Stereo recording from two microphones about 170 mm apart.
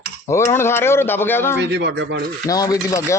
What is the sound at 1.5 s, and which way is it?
Speech, 90° right.